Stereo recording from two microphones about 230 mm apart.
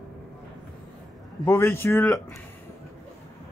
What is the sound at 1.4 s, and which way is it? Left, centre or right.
Speech, centre.